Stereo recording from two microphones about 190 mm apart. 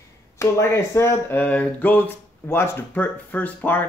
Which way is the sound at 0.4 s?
15° left (ahead or behind).